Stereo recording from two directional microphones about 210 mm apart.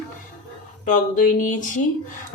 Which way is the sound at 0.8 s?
40° left (ahead or behind).